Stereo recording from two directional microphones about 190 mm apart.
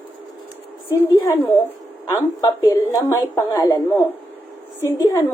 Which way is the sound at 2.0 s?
15° left (ahead or behind).